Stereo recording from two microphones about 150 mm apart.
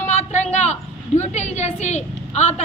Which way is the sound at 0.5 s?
50° left (ahead or behind).